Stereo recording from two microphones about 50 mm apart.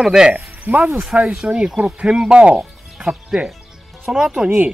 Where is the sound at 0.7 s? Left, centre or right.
Right.